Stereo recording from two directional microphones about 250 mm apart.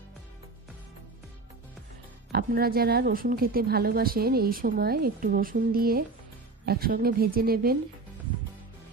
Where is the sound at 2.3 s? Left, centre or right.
Right.